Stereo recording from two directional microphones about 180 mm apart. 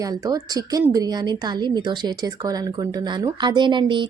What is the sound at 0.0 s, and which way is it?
A woman's voice, 20° right (ahead or behind).